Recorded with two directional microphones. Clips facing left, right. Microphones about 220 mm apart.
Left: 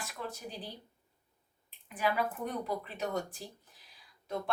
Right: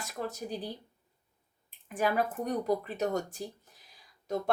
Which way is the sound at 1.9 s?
45° right (ahead or behind).